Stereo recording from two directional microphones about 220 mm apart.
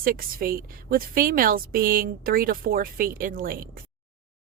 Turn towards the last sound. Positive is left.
turn(degrees=-40)  # may be behind; listen again after turning